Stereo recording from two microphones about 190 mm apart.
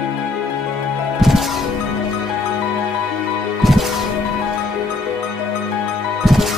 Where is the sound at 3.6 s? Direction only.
Centre (ahead or behind).